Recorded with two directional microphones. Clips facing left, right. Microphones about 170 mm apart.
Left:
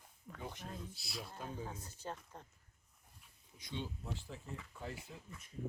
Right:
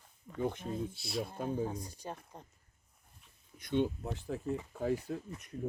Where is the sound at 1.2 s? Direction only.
55° right (ahead or behind).